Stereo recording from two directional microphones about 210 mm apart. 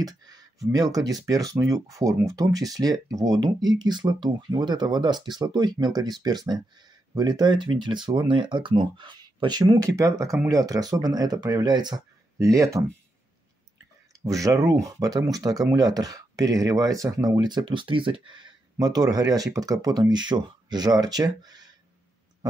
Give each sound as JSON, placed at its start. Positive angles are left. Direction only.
{"t": 0.0, "sound": "speech", "side_deg": -15}
{"t": 14.2, "sound": "speech", "side_deg": -15}